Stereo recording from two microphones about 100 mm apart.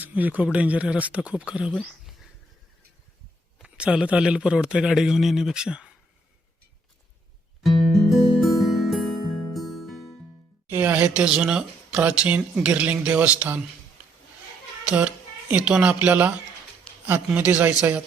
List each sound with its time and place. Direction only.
0.0 s a man's voice: 15° right (ahead or behind)
3.6 s speech: 10° right (ahead or behind)
7.6 s music: centre (ahead or behind)
9.1 s music: 45° left (ahead or behind)
9.5 s music: centre (ahead or behind)
10.7 s speech: 20° right (ahead or behind)
14.8 s speech: 15° right (ahead or behind)